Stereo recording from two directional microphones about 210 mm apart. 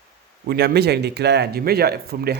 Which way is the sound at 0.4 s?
50° right (ahead or behind).